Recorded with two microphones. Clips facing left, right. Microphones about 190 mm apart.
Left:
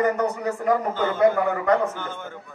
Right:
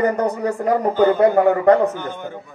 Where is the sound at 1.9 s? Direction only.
15° right (ahead or behind).